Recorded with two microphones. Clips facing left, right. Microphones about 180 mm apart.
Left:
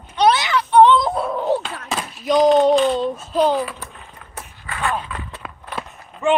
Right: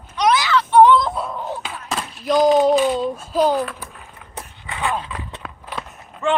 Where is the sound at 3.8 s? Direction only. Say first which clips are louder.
Even; 5° right (ahead or behind).